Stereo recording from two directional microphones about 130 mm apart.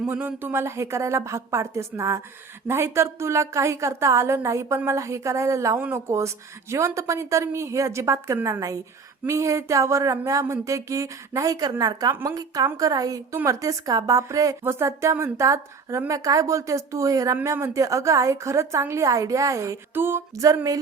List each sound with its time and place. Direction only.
0.0 s a woman's voice: 15° right (ahead or behind)